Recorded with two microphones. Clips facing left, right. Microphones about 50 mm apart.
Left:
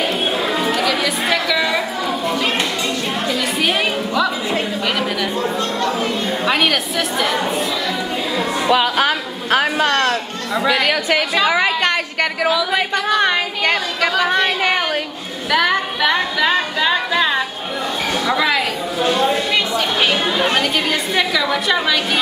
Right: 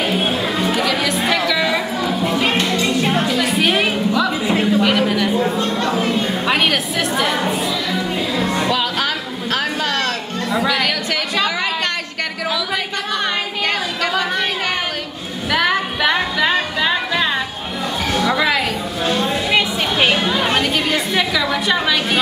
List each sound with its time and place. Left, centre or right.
0.0 s music: centre
8.7 s speech: centre
15.5 s a woman's voice: centre
19.5 s a woman's voice: centre